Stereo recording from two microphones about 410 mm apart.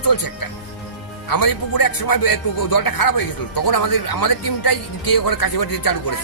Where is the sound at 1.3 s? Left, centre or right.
Left.